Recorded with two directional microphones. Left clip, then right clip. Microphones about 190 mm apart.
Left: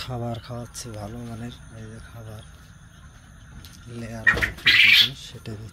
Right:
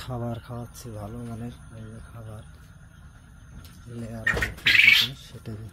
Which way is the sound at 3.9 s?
10° right (ahead or behind).